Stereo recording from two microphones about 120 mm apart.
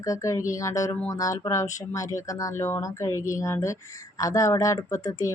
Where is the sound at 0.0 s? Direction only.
25° left (ahead or behind).